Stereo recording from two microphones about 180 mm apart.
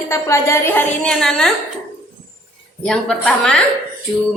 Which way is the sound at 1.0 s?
5° left (ahead or behind).